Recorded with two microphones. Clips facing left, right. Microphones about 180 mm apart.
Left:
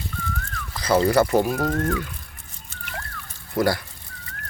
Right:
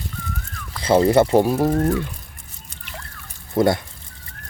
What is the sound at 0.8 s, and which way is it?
Speech, 25° right (ahead or behind).